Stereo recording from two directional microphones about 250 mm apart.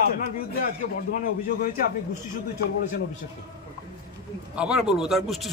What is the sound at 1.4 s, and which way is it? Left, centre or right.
Speech, left.